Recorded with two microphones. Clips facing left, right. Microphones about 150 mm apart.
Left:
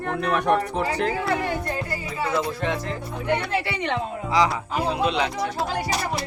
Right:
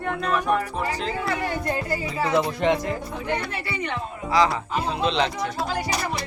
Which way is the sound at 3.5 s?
90° left.